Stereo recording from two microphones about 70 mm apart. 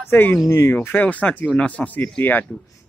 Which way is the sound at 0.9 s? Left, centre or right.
Left.